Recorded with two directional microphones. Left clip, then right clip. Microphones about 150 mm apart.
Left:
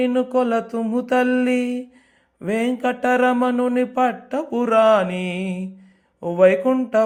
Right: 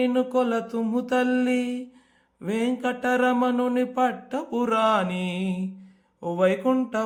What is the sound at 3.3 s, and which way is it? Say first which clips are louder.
Mantra: left 4 dB; 10° left (ahead or behind).